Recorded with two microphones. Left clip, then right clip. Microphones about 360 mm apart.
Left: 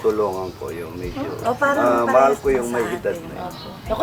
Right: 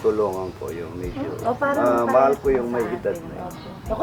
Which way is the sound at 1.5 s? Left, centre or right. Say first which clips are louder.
Left 2 dB; centre.